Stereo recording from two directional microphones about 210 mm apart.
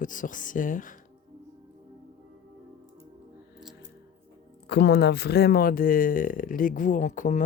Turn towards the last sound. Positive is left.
turn(degrees=40)  # may be behind; listen again after turning